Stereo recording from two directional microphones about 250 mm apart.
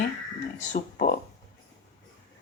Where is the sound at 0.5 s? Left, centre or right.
Left.